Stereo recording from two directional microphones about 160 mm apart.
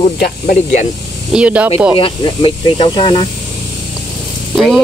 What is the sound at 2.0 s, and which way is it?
Speech, 35° left (ahead or behind).